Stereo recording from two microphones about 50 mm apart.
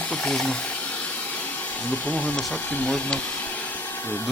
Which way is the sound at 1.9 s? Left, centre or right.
Left.